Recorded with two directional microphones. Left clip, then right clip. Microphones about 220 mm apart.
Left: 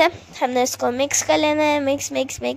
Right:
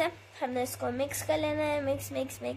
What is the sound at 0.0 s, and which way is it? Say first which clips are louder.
A woman's voice: left 13 dB; 40° left (ahead or behind).